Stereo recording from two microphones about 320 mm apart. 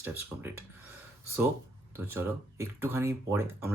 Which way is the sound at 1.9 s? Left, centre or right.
Centre.